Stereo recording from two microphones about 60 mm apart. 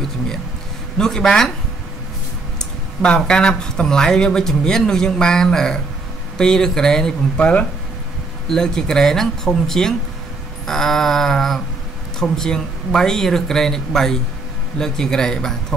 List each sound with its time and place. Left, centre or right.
0.9 s speech: centre
2.6 s speech: centre
7.3 s speech: left
8.5 s speech: centre
10.7 s a sound: centre
12.2 s speech: centre